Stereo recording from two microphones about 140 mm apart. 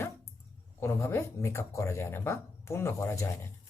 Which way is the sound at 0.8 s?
20° left (ahead or behind).